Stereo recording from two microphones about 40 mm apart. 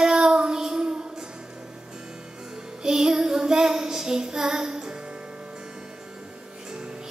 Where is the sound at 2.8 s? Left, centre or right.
Centre.